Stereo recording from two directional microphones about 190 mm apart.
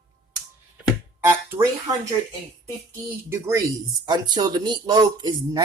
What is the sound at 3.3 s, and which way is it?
Speech, 15° right (ahead or behind).